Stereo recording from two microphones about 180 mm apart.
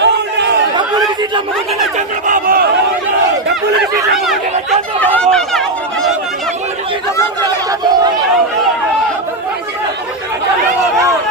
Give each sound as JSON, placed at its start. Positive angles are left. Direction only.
{"t": 0.0, "sound": "chatter", "side_deg": -70}
{"t": 2.2, "sound": "crowd", "side_deg": -50}
{"t": 4.9, "sound": "chatter", "side_deg": 5}